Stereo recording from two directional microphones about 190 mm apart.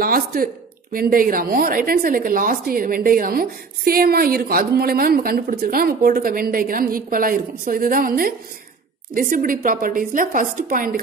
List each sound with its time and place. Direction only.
0.0 s a woman's voice: 50° right (ahead or behind)